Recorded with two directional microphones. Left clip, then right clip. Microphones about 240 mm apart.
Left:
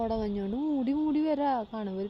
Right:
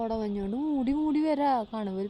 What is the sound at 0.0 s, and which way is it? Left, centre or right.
A woman's voice, centre.